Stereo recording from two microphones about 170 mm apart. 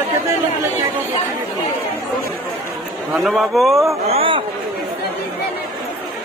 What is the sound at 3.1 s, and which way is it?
Speech, centre (ahead or behind).